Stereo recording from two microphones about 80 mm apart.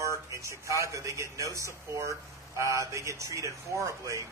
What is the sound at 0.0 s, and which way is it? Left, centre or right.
Speech, right.